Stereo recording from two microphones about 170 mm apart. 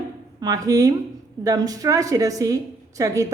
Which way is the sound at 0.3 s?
20° right (ahead or behind).